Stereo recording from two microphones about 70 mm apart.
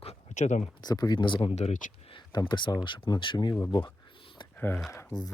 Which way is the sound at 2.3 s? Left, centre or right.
Left.